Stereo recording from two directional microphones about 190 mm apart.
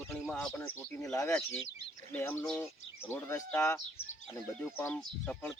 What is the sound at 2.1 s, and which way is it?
Speech, 10° left (ahead or behind).